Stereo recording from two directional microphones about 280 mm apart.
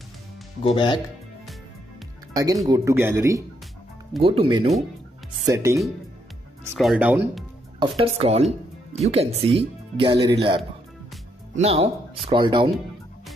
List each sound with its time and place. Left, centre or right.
0.7 s speech: centre
2.3 s speech: centre
4.2 s speech: centre
7.8 s speech: centre